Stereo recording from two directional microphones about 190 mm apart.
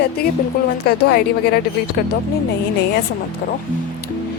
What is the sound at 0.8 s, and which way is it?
Speech, 55° left (ahead or behind).